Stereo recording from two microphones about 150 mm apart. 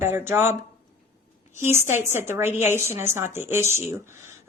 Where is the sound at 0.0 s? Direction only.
15° right (ahead or behind).